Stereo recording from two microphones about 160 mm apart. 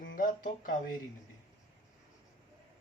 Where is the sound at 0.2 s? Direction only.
55° left (ahead or behind).